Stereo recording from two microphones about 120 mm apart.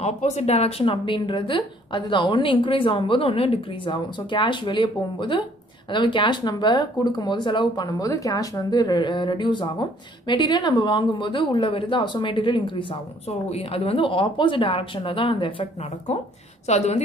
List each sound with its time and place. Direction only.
0.0 s speech: 70° left (ahead or behind); by 12.8 s 40° left (ahead or behind)
13.3 s speech: 55° left (ahead or behind)
16.6 s a woman's voice: 65° left (ahead or behind)